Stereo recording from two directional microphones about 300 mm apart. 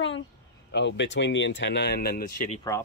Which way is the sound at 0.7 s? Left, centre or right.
Left.